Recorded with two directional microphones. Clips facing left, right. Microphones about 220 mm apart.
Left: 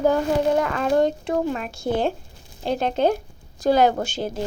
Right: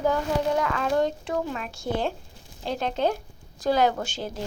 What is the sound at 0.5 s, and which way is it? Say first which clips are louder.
Speech: left 4 dB; 45° left (ahead or behind).